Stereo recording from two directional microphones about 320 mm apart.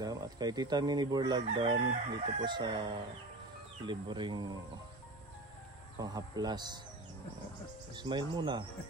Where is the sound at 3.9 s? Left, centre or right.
Centre.